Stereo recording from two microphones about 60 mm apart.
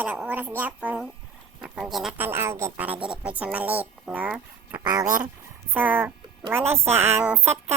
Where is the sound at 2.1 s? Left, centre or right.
Right.